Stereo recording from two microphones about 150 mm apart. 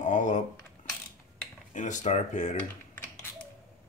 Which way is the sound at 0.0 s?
55° left (ahead or behind).